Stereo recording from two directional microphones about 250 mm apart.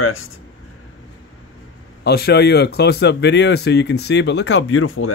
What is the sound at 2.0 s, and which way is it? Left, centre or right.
Speech, left.